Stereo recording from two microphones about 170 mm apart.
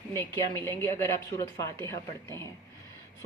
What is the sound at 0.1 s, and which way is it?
A woman's voice, 15° left (ahead or behind).